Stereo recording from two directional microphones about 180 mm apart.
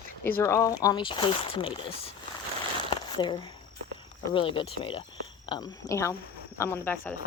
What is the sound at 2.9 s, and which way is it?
Crumpling, 25° left (ahead or behind).